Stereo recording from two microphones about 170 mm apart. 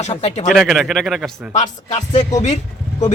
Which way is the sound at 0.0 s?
40° left (ahead or behind).